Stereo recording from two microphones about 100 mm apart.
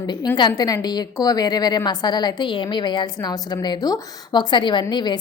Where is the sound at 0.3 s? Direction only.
45° left (ahead or behind).